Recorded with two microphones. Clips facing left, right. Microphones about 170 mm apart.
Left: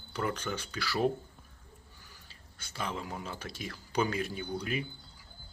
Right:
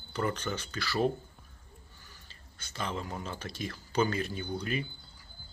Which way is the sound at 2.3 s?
10° left (ahead or behind).